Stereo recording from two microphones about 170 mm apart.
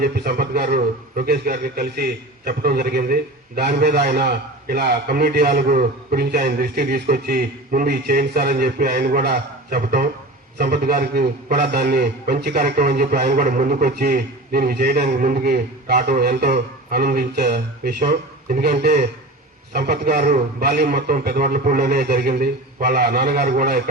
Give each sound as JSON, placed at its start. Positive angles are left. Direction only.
{"t": 0.0, "sound": "a man's voice", "side_deg": -60}